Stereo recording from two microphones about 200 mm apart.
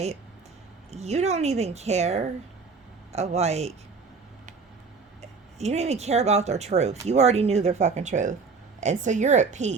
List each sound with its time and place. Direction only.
0.9 s speech: 35° right (ahead or behind)
5.2 s speech: 35° right (ahead or behind)